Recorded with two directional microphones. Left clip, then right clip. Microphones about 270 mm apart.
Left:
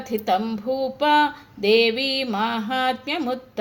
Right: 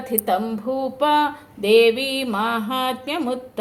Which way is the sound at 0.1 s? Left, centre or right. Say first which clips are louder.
Even; left.